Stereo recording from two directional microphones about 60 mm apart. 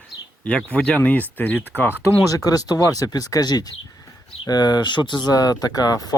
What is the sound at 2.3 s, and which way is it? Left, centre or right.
Speech, left.